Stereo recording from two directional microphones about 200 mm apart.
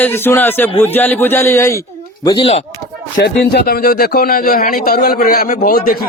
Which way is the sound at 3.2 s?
50° left (ahead or behind).